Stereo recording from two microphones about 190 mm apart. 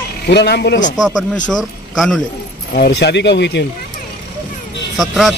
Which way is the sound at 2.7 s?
60° left (ahead or behind).